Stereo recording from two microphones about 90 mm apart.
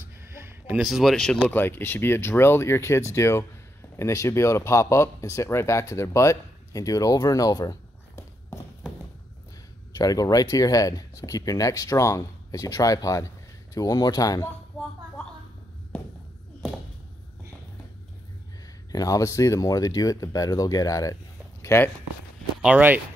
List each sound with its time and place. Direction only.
0.4 s a sound: 25° right (ahead or behind)
0.7 s speech: centre (ahead or behind)
1.5 s speech: 25° left (ahead or behind); by 7.7 s 45° left (ahead or behind)
9.9 s speech: 45° left (ahead or behind)
18.9 s speech: 40° left (ahead or behind)
22.6 s speech: 15° right (ahead or behind)